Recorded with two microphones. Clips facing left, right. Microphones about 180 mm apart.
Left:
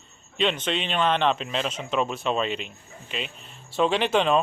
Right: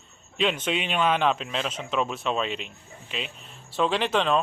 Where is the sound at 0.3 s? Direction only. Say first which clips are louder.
Even; 5° right (ahead or behind).